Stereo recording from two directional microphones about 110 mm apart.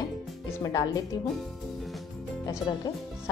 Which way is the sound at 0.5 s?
30° left (ahead or behind).